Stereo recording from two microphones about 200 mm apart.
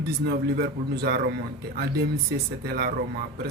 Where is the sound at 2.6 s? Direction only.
50° right (ahead or behind).